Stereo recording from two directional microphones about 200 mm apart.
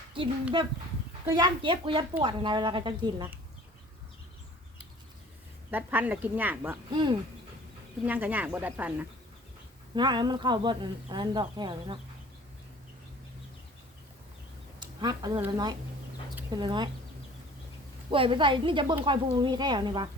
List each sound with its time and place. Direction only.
0.2 s speech: 25° right (ahead or behind)
5.7 s speech: 10° right (ahead or behind)
6.9 s speech: 25° right (ahead or behind)
8.0 s speech: 10° right (ahead or behind)
9.9 s speech: 20° right (ahead or behind)
14.8 s a sound: 20° right (ahead or behind)
16.5 s speech: 20° right (ahead or behind)
18.1 s speech: 25° right (ahead or behind)